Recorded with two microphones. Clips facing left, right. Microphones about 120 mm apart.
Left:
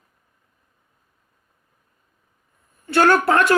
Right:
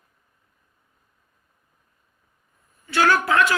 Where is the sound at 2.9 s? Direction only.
50° left (ahead or behind).